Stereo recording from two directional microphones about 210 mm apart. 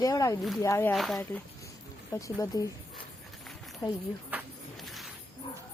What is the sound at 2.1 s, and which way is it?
Speech, 15° left (ahead or behind).